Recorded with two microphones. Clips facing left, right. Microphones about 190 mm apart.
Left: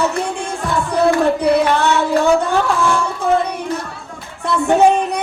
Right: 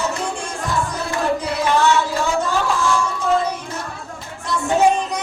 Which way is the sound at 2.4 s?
60° left (ahead or behind).